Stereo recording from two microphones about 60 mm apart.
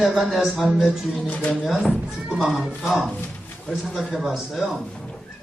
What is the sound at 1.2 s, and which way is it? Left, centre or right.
Speech, left.